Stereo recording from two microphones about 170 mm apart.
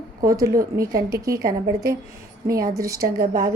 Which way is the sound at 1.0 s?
20° right (ahead or behind).